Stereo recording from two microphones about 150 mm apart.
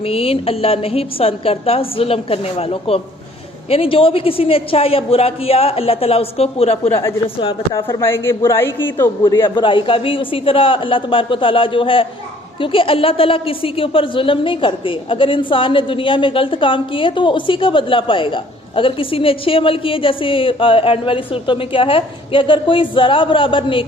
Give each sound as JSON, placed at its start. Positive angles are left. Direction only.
{"t": 0.0, "sound": "a woman's voice", "side_deg": 40}
{"t": 7.9, "sound": "a woman's voice", "side_deg": 15}
{"t": 9.6, "sound": "a woman's voice", "side_deg": 35}